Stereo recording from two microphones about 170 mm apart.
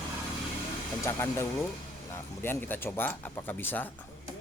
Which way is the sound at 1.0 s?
15° left (ahead or behind).